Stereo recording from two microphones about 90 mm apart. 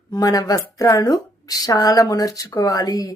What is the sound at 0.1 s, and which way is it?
Speech, 45° left (ahead or behind).